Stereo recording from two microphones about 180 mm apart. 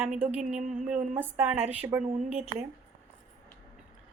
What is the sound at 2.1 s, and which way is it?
Speech, 35° right (ahead or behind).